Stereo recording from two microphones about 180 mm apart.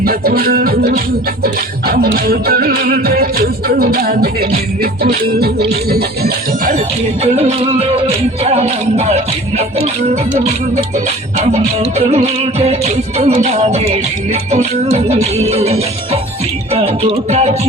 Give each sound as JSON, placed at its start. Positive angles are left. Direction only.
{"t": 0.0, "sound": "music", "side_deg": -60}
{"t": 7.3, "sound": "music", "side_deg": -35}